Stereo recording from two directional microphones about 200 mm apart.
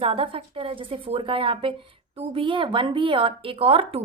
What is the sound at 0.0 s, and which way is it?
A woman's voice, 30° right (ahead or behind).